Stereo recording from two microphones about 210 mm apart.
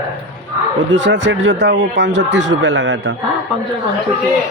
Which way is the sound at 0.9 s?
60° right (ahead or behind).